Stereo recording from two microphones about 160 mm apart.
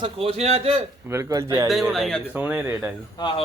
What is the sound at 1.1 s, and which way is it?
Speech, 20° right (ahead or behind).